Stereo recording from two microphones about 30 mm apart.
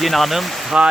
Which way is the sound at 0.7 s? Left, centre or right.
Right.